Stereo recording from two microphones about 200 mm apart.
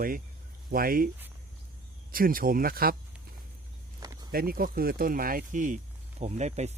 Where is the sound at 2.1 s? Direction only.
45° right (ahead or behind).